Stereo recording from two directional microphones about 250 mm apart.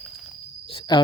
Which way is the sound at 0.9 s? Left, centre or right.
Centre.